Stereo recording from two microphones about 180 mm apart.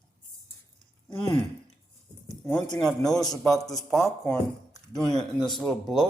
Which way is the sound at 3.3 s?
Centre (ahead or behind).